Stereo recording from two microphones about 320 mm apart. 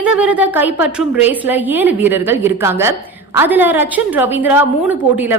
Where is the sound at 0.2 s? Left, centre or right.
Centre.